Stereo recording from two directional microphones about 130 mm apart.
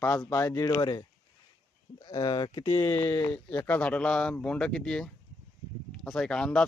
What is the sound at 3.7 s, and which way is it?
Speech, 10° left (ahead or behind).